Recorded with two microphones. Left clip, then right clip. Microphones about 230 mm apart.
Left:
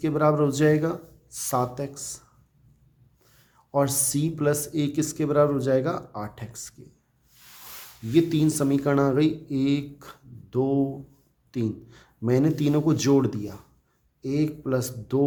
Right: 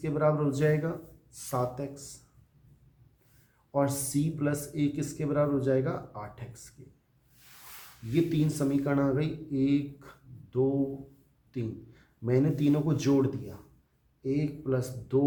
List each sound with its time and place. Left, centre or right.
0.0 s speech: left
3.7 s speech: left
8.1 s speech: left